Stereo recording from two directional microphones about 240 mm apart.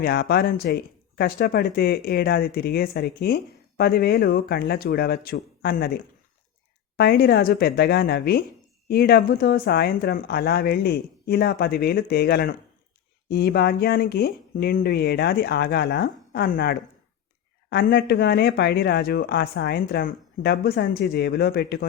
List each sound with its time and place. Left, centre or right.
0.0 s speech: left
6.9 s speech: left